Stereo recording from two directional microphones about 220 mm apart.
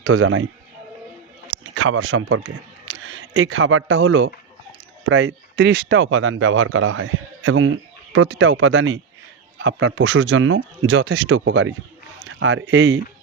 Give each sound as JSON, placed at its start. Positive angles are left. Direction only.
{"t": 0.0, "sound": "a man's voice", "side_deg": -70}
{"t": 1.7, "sound": "speech", "side_deg": -60}
{"t": 5.0, "sound": "speech", "side_deg": -55}